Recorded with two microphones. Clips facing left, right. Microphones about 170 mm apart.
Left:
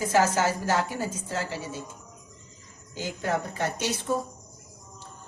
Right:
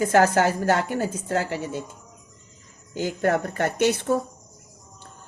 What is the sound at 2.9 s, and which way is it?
A woman's voice, 55° right (ahead or behind).